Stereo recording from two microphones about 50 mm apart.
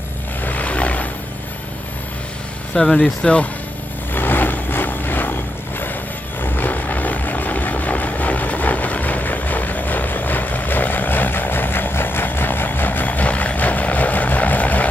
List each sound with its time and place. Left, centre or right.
0.5 s vehicle: left
2.7 s speech: centre
4.1 s vehicle: left
6.4 s vehicle: left